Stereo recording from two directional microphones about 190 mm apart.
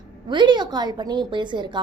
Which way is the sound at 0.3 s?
25° right (ahead or behind).